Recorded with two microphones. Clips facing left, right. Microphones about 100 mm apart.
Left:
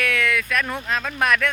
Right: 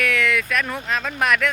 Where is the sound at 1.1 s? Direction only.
15° right (ahead or behind).